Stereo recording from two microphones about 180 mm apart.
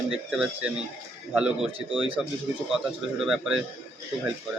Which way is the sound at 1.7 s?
30° right (ahead or behind).